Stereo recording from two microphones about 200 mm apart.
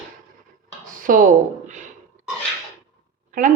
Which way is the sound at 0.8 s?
45° right (ahead or behind).